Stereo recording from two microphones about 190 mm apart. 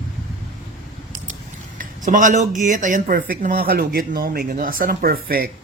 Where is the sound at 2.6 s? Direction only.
40° right (ahead or behind).